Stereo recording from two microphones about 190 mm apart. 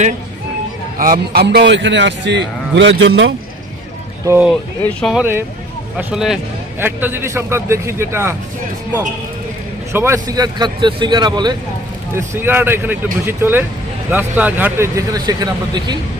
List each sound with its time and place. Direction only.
0.9 s a man's voice: 50° right (ahead or behind); by 3.3 s 70° right (ahead or behind)
4.3 s a man's voice: 10° right (ahead or behind)
4.8 s speech: 5° left (ahead or behind)
5.2 s a man's voice: 10° right (ahead or behind)
9.9 s a man's voice: 15° right (ahead or behind)